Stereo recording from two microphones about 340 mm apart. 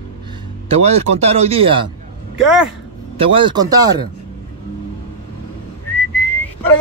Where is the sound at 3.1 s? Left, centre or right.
Centre.